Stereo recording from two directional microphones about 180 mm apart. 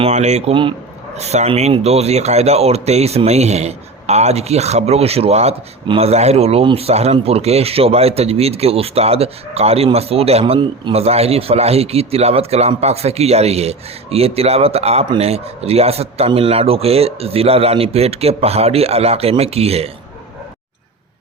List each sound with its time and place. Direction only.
0.0 s speech: 40° right (ahead or behind)